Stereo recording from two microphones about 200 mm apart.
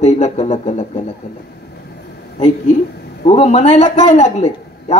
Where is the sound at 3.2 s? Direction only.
30° left (ahead or behind).